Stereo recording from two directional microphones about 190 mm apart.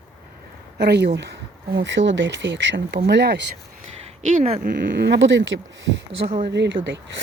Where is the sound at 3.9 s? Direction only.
35° right (ahead or behind).